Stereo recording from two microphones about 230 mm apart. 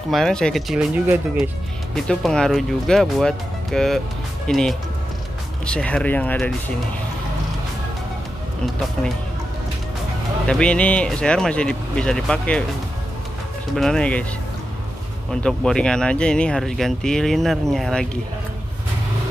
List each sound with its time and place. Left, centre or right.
0.1 s speech: centre
10.4 s speech: centre
13.7 s speech: centre
15.4 s speech: centre